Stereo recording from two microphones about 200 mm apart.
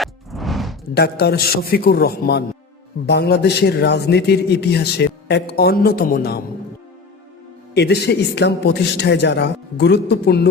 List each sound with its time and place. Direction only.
0.0 s music: centre (ahead or behind)
0.9 s a man's voice: 55° left (ahead or behind)
7.7 s a man's voice: 55° left (ahead or behind)